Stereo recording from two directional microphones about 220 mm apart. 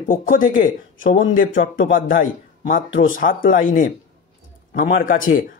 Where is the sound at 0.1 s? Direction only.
40° left (ahead or behind).